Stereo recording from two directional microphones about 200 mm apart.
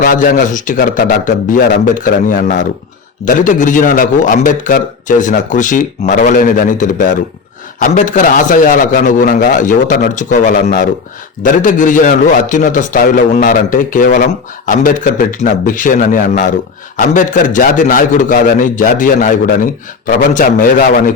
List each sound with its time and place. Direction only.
0.0 s a man's voice: 40° left (ahead or behind)